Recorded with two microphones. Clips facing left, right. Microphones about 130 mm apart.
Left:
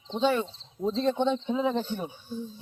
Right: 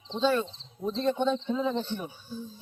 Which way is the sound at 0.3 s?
20° left (ahead or behind).